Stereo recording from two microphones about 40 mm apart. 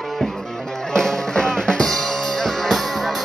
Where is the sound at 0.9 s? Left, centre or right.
Centre.